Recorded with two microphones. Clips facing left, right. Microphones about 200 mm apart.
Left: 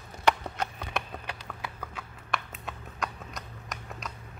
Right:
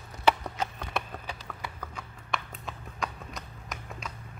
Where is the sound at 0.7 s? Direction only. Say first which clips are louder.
Even; 5° left (ahead or behind).